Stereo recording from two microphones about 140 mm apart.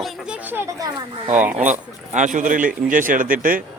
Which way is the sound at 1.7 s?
60° right (ahead or behind).